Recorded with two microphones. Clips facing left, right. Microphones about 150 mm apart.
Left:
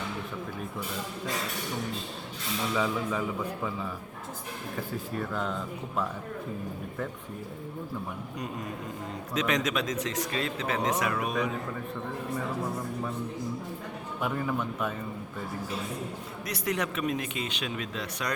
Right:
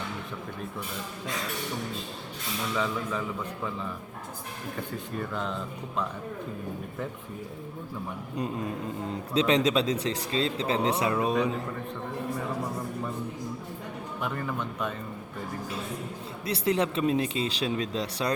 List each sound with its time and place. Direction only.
2.7 s a man's voice: 10° left (ahead or behind)
5.1 s speech: centre (ahead or behind)
9.3 s speech: 30° right (ahead or behind)
14.2 s speech: 5° left (ahead or behind)
16.5 s speech: 30° right (ahead or behind)